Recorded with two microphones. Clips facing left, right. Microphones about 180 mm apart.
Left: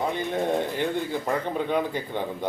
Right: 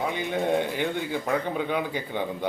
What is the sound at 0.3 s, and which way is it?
Speech, 5° right (ahead or behind).